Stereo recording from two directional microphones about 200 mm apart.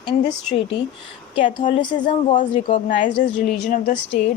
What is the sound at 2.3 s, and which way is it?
Speech, 35° left (ahead or behind).